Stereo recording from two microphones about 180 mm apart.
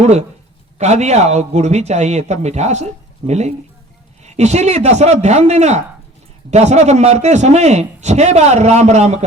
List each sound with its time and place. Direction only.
0.0 s a man's voice: 40° right (ahead or behind)